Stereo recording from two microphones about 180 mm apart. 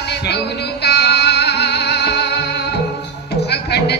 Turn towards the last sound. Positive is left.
turn(degrees=65)  # may be behind; listen again after turning